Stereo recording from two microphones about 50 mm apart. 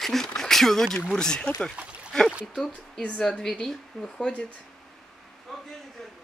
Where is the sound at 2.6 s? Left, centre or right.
Left.